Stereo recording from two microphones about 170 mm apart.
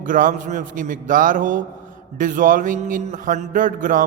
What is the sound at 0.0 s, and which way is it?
A man's voice, 50° right (ahead or behind).